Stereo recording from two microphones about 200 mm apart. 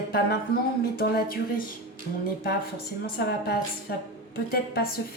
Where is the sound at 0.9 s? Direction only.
45° left (ahead or behind).